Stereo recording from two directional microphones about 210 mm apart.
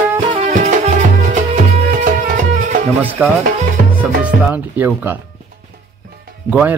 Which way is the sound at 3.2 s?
5° right (ahead or behind).